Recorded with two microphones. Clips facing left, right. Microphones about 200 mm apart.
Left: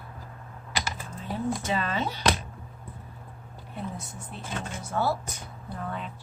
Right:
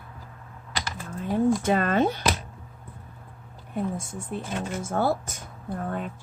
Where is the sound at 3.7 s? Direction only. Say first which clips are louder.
Right 7 dB; 50° right (ahead or behind).